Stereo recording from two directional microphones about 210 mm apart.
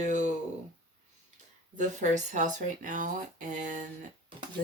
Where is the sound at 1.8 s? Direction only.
35° right (ahead or behind).